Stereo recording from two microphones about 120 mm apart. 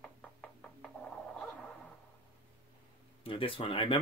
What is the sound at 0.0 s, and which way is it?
Knock, 5° left (ahead or behind).